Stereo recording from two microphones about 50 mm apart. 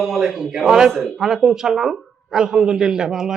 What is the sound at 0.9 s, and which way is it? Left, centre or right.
A man's voice, centre.